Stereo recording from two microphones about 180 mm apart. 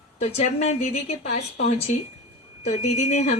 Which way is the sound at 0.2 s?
35° left (ahead or behind).